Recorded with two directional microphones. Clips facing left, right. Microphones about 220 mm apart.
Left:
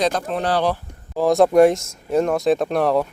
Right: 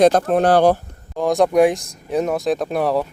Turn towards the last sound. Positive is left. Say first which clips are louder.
# left 1 dB
turn(degrees=0)  # may be behind; listen again after turning